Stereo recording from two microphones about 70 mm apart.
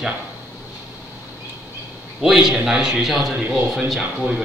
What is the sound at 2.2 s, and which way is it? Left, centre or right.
A man's voice, centre.